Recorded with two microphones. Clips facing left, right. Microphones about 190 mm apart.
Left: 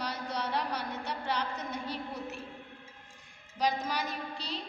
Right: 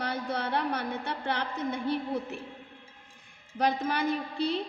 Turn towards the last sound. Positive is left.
turn(degrees=-60)  # may be behind; listen again after turning